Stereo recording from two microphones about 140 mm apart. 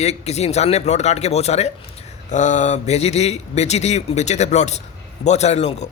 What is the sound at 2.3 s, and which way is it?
Speech, 60° left (ahead or behind).